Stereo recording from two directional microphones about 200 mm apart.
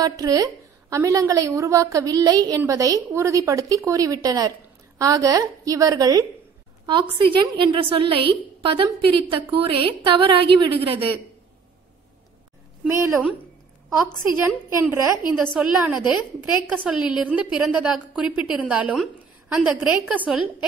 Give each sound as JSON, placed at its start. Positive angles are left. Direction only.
{"t": 0.2, "sound": "a woman's voice", "side_deg": -20}
{"t": 12.8, "sound": "a woman's voice", "side_deg": -10}
{"t": 15.3, "sound": "a woman's voice", "side_deg": -5}